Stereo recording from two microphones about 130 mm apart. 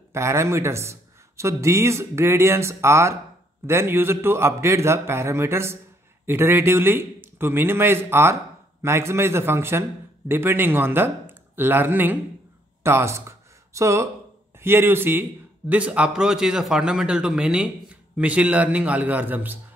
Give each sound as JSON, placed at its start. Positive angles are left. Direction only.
{"t": 0.1, "sound": "a man's voice", "side_deg": -20}